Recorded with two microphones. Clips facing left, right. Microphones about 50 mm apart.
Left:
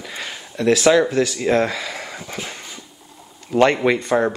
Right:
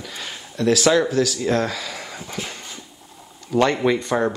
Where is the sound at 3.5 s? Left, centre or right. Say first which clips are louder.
Left 2 dB; left.